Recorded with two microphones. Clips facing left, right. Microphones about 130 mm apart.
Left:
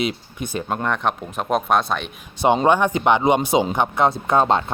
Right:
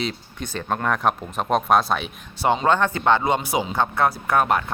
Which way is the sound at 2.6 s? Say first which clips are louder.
Even; 15° left (ahead or behind).